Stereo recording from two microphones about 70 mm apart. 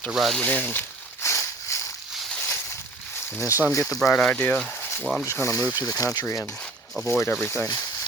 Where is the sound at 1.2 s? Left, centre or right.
Left.